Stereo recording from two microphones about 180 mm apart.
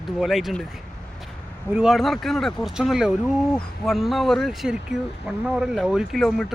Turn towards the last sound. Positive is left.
turn(degrees=0)  # may be behind; listen again after turning